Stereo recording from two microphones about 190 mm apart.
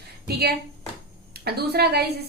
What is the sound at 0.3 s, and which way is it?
A woman's voice, 55° right (ahead or behind).